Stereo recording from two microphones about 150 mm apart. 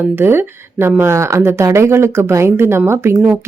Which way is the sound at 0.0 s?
15° right (ahead or behind).